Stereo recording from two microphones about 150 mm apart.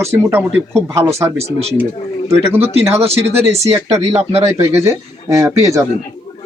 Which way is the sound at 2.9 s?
45° right (ahead or behind).